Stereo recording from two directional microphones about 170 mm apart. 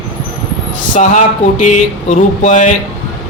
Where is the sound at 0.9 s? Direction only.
45° left (ahead or behind).